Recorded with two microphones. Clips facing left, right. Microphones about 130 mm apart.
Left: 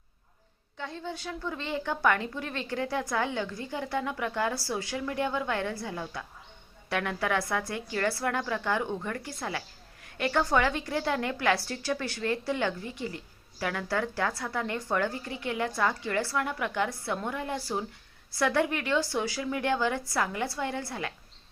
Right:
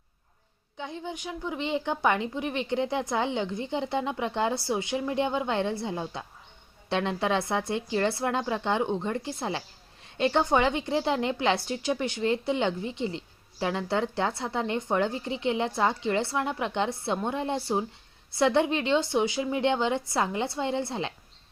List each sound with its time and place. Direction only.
0.8 s a woman's voice: 15° right (ahead or behind)